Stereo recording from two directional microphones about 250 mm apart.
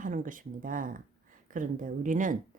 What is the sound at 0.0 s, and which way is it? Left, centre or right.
Speech, right.